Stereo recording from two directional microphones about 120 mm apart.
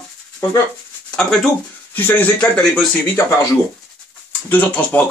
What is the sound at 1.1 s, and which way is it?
Speech, 5° left (ahead or behind).